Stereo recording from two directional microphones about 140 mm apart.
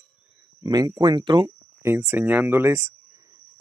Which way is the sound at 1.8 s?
15° right (ahead or behind).